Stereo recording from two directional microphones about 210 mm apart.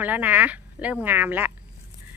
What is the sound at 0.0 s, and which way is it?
Speech, 5° right (ahead or behind).